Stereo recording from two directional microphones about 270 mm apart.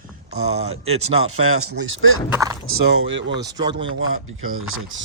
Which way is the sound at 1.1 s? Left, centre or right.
Right.